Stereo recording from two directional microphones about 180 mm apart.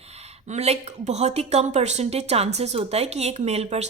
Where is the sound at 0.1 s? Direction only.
40° right (ahead or behind).